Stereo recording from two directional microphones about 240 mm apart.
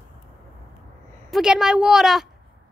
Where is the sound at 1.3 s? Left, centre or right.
Centre.